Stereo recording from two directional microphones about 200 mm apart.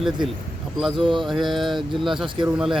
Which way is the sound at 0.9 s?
25° right (ahead or behind).